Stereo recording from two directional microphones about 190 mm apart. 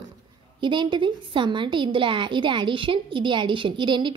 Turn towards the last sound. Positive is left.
turn(degrees=-25)  # may be behind; listen again after turning